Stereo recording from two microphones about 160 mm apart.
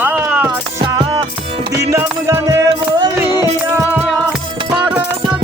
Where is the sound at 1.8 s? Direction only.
20° right (ahead or behind).